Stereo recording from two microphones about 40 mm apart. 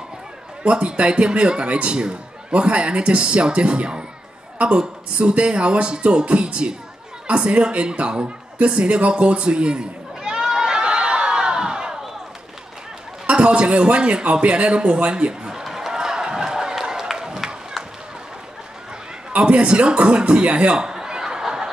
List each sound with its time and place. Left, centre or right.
0.7 s speech: right
7.2 s a sound: right
13.3 s speech: right
15.6 s run: centre
19.3 s a man's voice: right; by 21.6 s centre